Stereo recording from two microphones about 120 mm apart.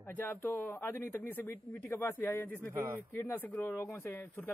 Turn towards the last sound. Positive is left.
turn(degrees=15)  # may be behind; listen again after turning